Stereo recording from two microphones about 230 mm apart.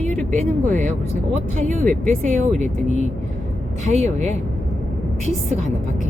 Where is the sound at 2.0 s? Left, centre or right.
Right.